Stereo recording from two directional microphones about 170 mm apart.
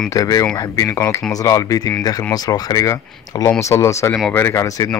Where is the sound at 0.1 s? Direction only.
20° left (ahead or behind).